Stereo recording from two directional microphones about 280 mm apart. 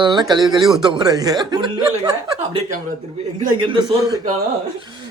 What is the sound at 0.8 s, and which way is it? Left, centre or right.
Speech, centre.